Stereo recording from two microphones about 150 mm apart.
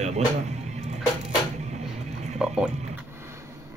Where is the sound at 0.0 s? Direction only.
50° right (ahead or behind).